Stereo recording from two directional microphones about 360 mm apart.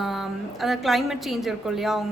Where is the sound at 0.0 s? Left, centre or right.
Centre.